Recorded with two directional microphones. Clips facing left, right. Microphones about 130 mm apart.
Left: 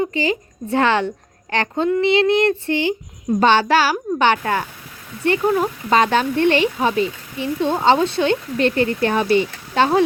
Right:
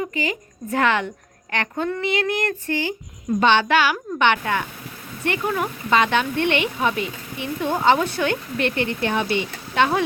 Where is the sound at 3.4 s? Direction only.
40° left (ahead or behind).